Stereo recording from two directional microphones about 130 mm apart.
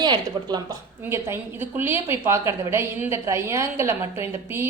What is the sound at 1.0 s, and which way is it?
A woman's voice, 15° right (ahead or behind).